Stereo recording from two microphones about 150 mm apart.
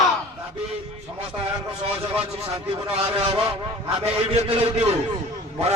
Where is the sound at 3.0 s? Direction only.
40° right (ahead or behind).